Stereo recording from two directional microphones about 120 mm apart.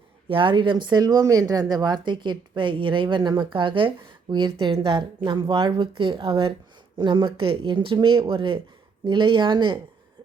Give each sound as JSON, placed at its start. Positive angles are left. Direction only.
{"t": 0.3, "sound": "speech", "side_deg": -45}